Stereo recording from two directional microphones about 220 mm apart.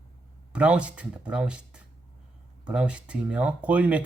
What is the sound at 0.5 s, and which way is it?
Speech, 5° right (ahead or behind).